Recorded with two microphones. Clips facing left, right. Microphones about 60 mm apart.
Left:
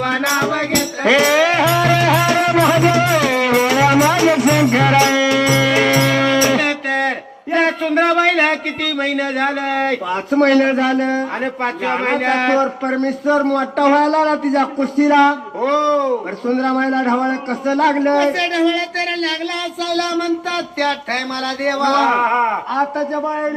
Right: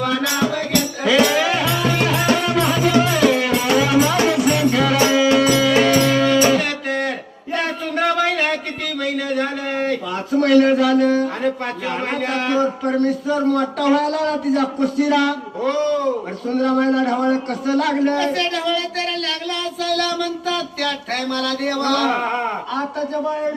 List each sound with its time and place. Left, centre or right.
0.0 s music: left
5.4 s music: left
7.5 s a sound: left
9.0 s speech: left
19.9 s speech: left
21.6 s speech: left